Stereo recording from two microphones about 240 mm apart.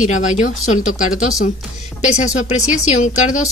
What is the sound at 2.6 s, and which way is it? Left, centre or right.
Speech, left.